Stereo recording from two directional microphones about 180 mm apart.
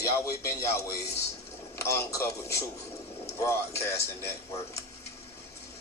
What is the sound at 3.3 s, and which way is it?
Speech, 15° left (ahead or behind).